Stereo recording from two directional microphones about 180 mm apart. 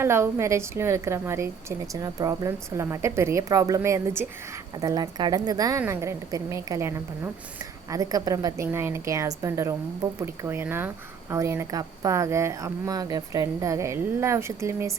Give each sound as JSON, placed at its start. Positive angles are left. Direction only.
{"t": 0.0, "sound": "a woman's voice", "side_deg": -15}